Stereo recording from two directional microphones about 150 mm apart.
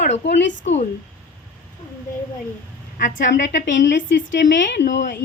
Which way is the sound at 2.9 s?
60° left (ahead or behind).